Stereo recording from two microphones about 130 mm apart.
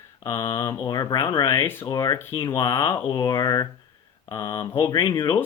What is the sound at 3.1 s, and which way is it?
Speech, 35° left (ahead or behind).